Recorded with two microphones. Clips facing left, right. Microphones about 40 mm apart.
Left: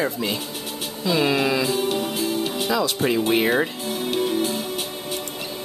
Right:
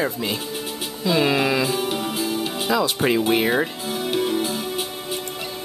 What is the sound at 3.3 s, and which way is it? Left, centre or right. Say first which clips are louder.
Speech: even; centre.